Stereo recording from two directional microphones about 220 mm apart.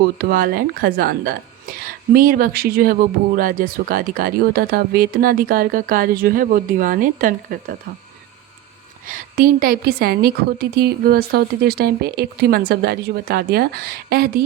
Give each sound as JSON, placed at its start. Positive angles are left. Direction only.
{"t": 0.2, "sound": "a woman's voice", "side_deg": -40}
{"t": 9.0, "sound": "a woman's voice", "side_deg": -40}